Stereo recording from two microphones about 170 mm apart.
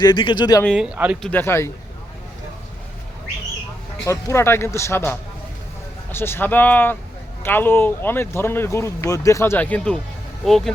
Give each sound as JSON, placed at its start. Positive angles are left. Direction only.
{"t": 0.0, "sound": "speech", "side_deg": 25}
{"t": 0.6, "sound": "speech", "side_deg": 0}
{"t": 1.2, "sound": "speech", "side_deg": 10}
{"t": 4.0, "sound": "speech", "side_deg": 15}